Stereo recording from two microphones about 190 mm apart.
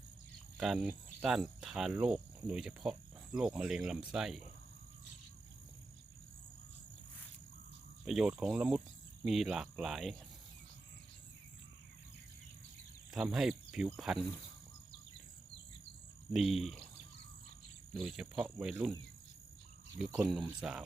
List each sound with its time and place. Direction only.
0.5 s speech: centre (ahead or behind)
8.0 s speech: 5° right (ahead or behind)
13.3 s speech: centre (ahead or behind)
16.3 s speech: centre (ahead or behind)
17.9 s speech: centre (ahead or behind)
20.1 s speech: 20° right (ahead or behind)
20.3 s speech: centre (ahead or behind)